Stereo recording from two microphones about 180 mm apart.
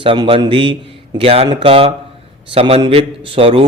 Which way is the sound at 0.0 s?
30° right (ahead or behind).